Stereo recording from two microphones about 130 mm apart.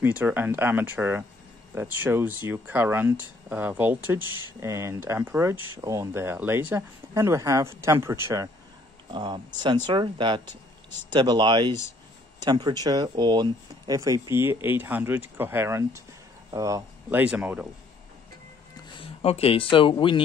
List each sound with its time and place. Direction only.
0.0 s speech: 15° right (ahead or behind)
9.1 s speech: 35° right (ahead or behind)
17.2 s speech: 10° right (ahead or behind)
18.9 s speech: 50° left (ahead or behind)